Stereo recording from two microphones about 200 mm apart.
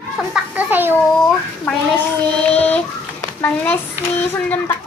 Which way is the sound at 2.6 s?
10° left (ahead or behind).